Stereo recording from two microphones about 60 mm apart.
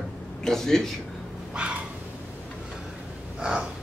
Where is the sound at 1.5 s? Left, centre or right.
Centre.